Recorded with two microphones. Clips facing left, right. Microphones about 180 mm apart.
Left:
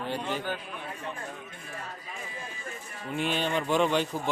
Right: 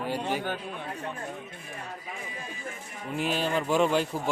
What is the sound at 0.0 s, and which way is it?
Speech, 10° right (ahead or behind).